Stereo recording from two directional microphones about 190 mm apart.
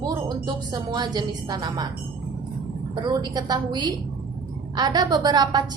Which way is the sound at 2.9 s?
20° right (ahead or behind).